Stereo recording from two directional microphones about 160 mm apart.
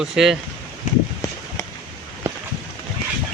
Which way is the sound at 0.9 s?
50° left (ahead or behind).